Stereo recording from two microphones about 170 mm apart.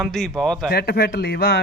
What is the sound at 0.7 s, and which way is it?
Speech, 65° left (ahead or behind).